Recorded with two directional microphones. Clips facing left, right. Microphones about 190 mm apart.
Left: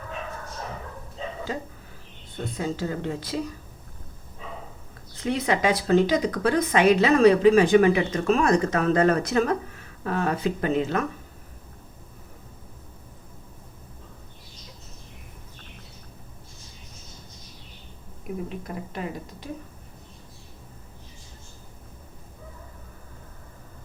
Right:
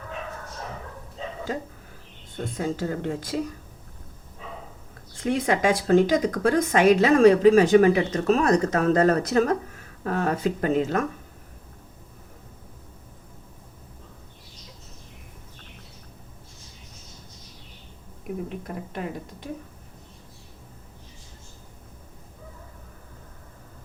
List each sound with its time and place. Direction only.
1.5 s speech: 45° right (ahead or behind)
5.1 s speech: 50° right (ahead or behind)
18.4 s speech: 55° right (ahead or behind)